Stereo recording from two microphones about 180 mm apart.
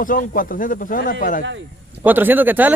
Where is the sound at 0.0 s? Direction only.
50° left (ahead or behind).